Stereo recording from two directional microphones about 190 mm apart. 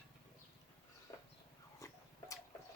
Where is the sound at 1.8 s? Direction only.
15° left (ahead or behind).